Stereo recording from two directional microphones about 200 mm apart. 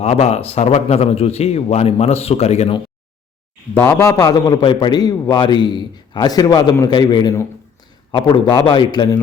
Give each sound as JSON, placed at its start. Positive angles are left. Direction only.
{"t": 0.0, "sound": "a man's voice", "side_deg": 30}
{"t": 3.8, "sound": "a man's voice", "side_deg": 15}